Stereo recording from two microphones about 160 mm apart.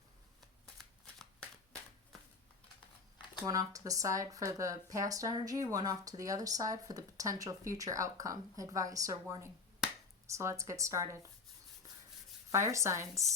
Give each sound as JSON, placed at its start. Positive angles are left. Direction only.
{"t": 3.4, "sound": "speech", "side_deg": -20}
{"t": 12.5, "sound": "speech", "side_deg": -20}